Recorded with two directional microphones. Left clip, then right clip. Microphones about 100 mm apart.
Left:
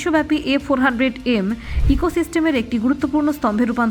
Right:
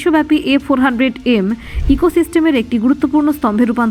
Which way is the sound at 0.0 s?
35° right (ahead or behind).